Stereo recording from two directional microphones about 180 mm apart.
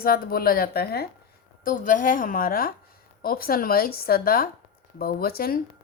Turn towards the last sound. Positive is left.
turn(degrees=55)  # may be behind; listen again after turning